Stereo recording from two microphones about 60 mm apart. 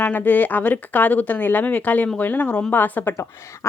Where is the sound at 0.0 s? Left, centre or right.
Left.